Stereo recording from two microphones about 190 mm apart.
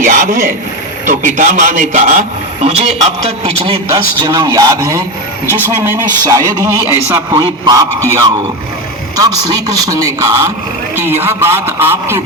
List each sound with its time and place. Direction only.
0.0 s a man's voice: 45° right (ahead or behind); by 12.2 s 10° right (ahead or behind)